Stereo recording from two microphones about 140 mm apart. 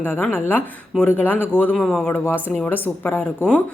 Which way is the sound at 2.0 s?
15° left (ahead or behind).